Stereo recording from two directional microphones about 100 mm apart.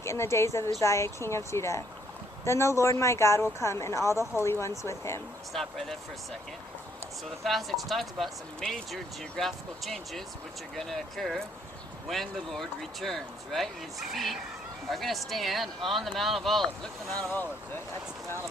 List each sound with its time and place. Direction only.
0.0 s speech: 30° left (ahead or behind)
5.5 s speech: centre (ahead or behind)
7.4 s speech: centre (ahead or behind)